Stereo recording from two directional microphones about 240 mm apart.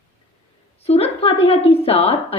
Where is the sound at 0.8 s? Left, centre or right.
Left.